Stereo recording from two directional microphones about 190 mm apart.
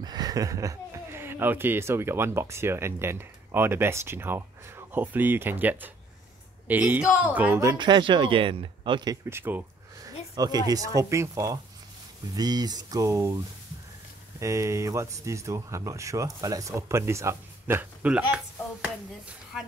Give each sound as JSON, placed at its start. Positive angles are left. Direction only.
{"t": 0.0, "sound": "speech", "side_deg": -20}
{"t": 7.7, "sound": "speech", "side_deg": -25}
{"t": 14.4, "sound": "speech", "side_deg": -15}